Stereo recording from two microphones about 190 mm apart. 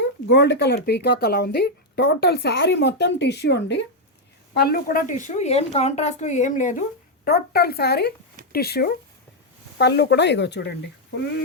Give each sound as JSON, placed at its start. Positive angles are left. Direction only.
{"t": 0.0, "sound": "speech", "side_deg": 70}
{"t": 4.5, "sound": "a woman's voice", "side_deg": 55}
{"t": 7.3, "sound": "speech", "side_deg": 55}